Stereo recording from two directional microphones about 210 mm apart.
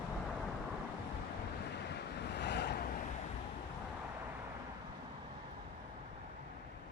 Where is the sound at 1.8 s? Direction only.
55° left (ahead or behind).